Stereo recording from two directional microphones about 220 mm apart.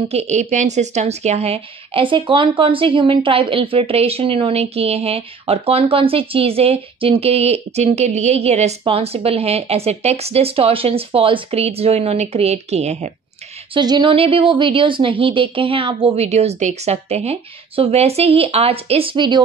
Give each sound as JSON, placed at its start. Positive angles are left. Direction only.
{"t": 0.1, "sound": "speech", "side_deg": -30}